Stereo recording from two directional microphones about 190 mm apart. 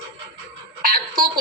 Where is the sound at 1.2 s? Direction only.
20° right (ahead or behind).